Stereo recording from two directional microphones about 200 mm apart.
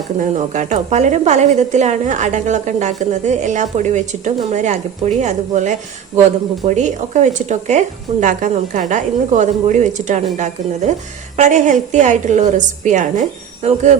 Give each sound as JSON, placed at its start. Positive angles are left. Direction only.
{"t": 0.2, "sound": "a woman's voice", "side_deg": -40}
{"t": 6.7, "sound": "a woman's voice", "side_deg": -35}